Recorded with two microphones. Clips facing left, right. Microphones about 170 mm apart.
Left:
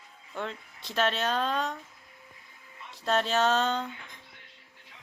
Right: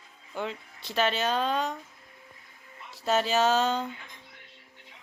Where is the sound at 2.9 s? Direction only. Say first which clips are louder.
Right 1 dB; 5° right (ahead or behind).